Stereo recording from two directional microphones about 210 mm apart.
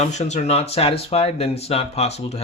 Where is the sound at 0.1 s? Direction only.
35° left (ahead or behind).